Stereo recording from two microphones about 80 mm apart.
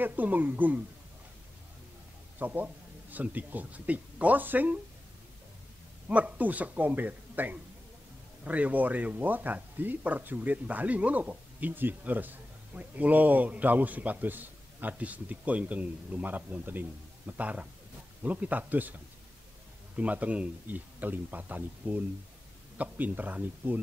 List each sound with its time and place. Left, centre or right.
0.0 s speech: right
2.3 s speech: right
6.0 s speech: centre
20.0 s speech: centre